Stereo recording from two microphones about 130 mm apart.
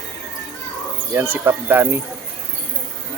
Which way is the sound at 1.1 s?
15° right (ahead or behind).